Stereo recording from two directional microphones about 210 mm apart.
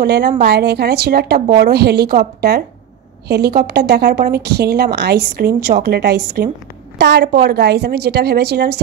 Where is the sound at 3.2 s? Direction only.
50° right (ahead or behind).